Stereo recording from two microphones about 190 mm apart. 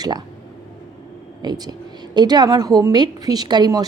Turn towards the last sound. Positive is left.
turn(degrees=-20)  # may be behind; listen again after turning